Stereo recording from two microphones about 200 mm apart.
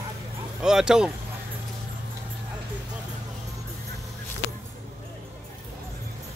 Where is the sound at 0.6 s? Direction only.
5° right (ahead or behind).